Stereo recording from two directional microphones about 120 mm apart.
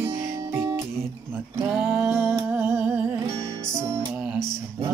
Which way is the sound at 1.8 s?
20° right (ahead or behind).